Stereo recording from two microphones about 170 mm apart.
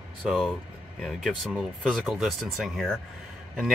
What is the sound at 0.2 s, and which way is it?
Speech, centre (ahead or behind).